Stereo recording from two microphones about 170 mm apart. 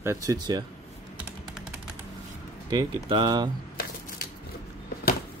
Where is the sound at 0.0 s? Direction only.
15° right (ahead or behind).